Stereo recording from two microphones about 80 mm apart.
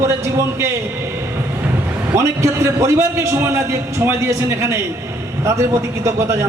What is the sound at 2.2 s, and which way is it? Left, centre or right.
A man's voice, right.